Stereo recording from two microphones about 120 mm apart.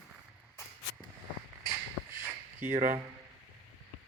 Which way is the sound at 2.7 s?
90° right.